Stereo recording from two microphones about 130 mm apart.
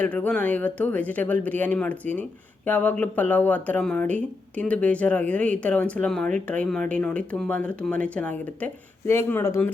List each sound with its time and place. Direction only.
0.0 s speech: 10° left (ahead or behind)